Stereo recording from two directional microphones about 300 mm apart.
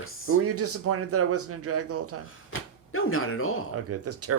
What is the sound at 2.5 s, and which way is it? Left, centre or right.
Speech, left.